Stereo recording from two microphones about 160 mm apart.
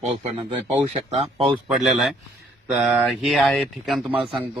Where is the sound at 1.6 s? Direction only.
Centre (ahead or behind).